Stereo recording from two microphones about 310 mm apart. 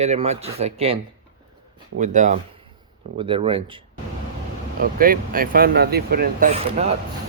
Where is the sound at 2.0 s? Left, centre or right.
Right.